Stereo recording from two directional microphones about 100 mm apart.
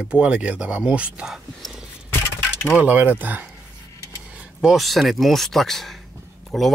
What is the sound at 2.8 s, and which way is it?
Speech, 15° right (ahead or behind).